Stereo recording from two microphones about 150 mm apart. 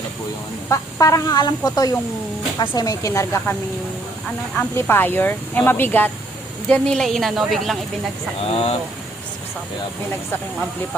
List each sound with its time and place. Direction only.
0.7 s speech: 20° left (ahead or behind)
4.5 s a woman's voice: 15° left (ahead or behind)
8.4 s speech: 40° left (ahead or behind)